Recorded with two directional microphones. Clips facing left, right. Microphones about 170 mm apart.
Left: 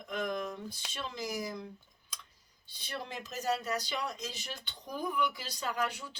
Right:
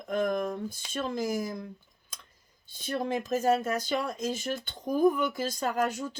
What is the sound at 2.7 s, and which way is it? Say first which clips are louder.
Speech: right 11 dB; 50° right (ahead or behind).